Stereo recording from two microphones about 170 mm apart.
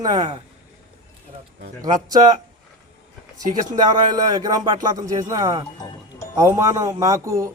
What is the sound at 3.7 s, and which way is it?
Speech, 25° right (ahead or behind).